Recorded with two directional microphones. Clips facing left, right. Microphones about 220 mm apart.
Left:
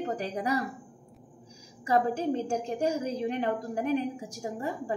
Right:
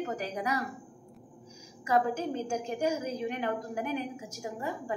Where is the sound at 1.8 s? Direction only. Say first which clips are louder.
Left 2 dB; 35° left (ahead or behind).